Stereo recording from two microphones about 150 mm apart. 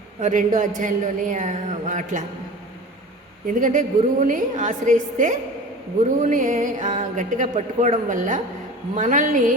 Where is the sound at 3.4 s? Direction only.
60° right (ahead or behind).